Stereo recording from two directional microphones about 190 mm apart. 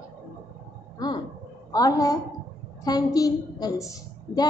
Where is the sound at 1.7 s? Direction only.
20° left (ahead or behind).